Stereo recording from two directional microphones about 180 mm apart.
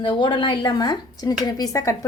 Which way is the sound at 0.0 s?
25° left (ahead or behind).